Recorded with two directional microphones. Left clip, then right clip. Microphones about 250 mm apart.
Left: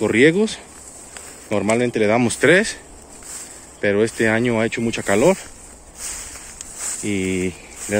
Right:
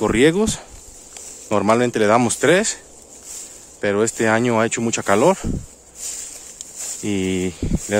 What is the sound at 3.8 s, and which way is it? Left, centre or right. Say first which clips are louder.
Speech: left 1 dB; centre.